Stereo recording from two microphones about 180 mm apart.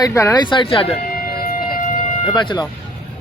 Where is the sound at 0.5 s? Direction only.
30° left (ahead or behind).